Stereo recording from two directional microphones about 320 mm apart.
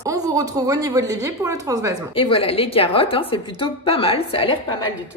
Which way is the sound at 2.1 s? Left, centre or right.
Centre.